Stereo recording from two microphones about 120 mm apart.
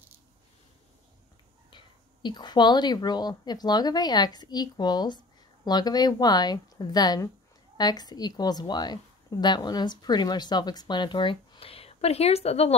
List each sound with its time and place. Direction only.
1.7 s a woman's voice: 40° left (ahead or behind); by 12.7 s 60° left (ahead or behind)